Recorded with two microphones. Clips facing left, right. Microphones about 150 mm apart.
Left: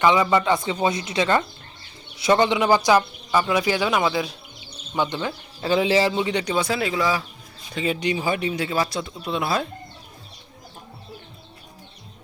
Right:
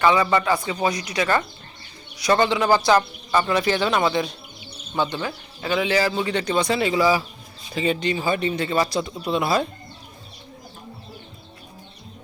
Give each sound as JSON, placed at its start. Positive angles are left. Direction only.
{"t": 0.0, "sound": "speech", "side_deg": 15}
{"t": 4.9, "sound": "speech", "side_deg": 15}
{"t": 5.5, "sound": "speech", "side_deg": 30}
{"t": 7.9, "sound": "speech", "side_deg": 10}